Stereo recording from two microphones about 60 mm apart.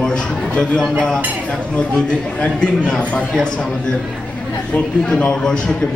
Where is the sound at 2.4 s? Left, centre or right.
Centre.